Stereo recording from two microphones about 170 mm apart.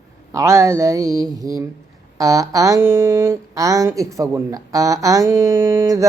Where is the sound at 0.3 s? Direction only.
15° right (ahead or behind).